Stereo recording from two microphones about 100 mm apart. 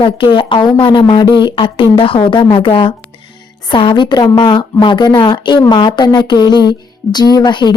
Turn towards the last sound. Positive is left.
turn(degrees=45)  # may be behind; listen again after turning